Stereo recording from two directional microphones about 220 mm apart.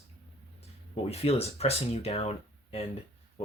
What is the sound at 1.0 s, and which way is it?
Speech, 25° left (ahead or behind).